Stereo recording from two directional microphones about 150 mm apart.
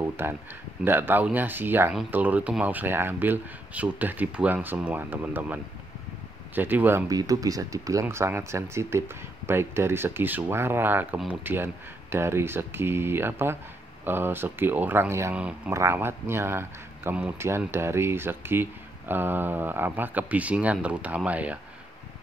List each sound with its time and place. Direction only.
0.0 s a man's voice: 15° right (ahead or behind)
7.1 s a man's voice: 25° right (ahead or behind)